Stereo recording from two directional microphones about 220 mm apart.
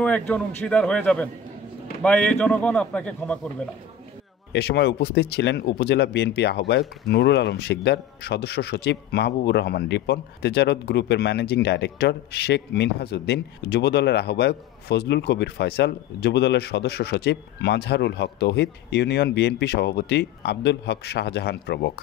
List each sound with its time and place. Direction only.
0.0 s a man's voice: 5° left (ahead or behind)
4.5 s speech: 50° left (ahead or behind)